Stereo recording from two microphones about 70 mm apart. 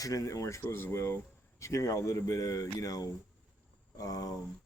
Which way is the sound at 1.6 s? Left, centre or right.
Left.